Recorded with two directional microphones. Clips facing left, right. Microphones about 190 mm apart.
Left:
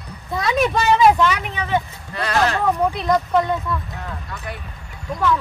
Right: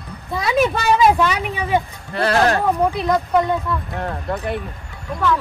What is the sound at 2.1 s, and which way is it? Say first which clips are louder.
Speech: right 4 dB; 30° right (ahead or behind).